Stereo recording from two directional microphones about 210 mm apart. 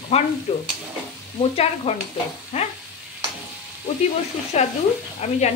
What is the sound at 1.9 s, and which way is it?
Speech, 30° left (ahead or behind).